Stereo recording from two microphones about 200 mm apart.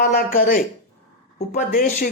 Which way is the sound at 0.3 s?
45° left (ahead or behind).